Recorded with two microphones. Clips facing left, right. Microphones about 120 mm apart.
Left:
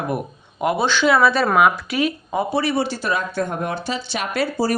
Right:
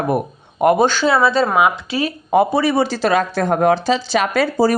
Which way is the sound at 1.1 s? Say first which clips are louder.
Right 1 dB; 25° right (ahead or behind).